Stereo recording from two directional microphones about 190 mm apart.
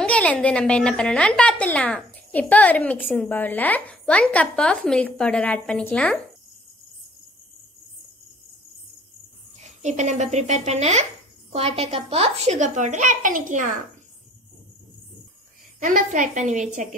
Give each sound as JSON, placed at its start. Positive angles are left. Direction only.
{"t": 0.0, "sound": "a woman's voice", "side_deg": 5}
{"t": 9.6, "sound": "a woman's voice", "side_deg": -35}
{"t": 15.8, "sound": "a woman's voice", "side_deg": -45}